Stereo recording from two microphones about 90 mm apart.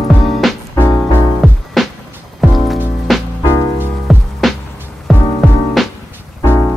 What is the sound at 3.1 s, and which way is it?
Music, centre (ahead or behind).